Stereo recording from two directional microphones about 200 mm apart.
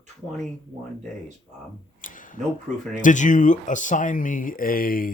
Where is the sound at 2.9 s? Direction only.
40° left (ahead or behind).